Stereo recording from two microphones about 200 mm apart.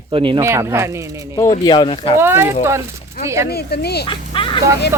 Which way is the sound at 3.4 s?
50° left (ahead or behind).